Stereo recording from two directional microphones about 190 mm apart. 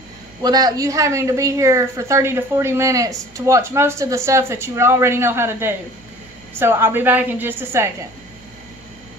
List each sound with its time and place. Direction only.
0.4 s a woman's voice: 20° right (ahead or behind)